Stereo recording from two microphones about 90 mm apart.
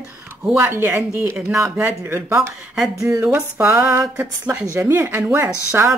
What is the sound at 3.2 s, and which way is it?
A woman's voice, 20° right (ahead or behind).